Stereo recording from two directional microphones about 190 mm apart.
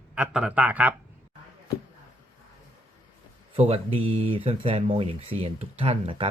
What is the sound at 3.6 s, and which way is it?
Speech, 30° right (ahead or behind).